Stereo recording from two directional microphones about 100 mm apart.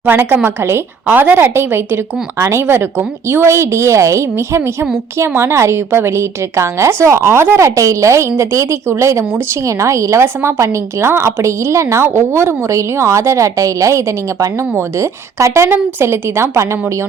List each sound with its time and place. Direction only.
0.0 s a woman's voice: 20° right (ahead or behind)